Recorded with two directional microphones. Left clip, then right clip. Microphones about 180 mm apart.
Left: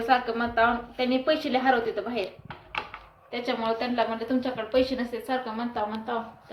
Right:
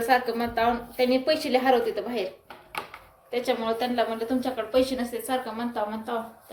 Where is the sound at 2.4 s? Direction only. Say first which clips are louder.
Left 2 dB; 65° right (ahead or behind).